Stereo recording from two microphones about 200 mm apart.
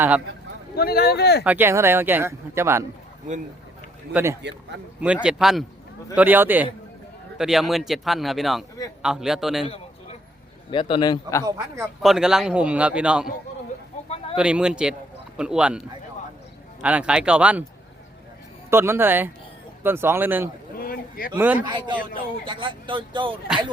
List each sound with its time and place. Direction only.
0.8 s speech: 50° left (ahead or behind)
1.5 s speech: 10° right (ahead or behind)
4.1 s a man's voice: 10° right (ahead or behind)
9.6 s a sound: 30° left (ahead or behind)
10.7 s a man's voice: 25° left (ahead or behind)
11.4 s speech: 15° right (ahead or behind)
12.0 s a man's voice: 5° right (ahead or behind)
14.3 s a man's voice: 5° right (ahead or behind)
16.8 s speech: 5° right (ahead or behind)
18.7 s speech: 10° right (ahead or behind)
20.7 s a man's voice: 50° left (ahead or behind)
21.3 s speech: 10° right (ahead or behind)
21.6 s speech: 20° right (ahead or behind)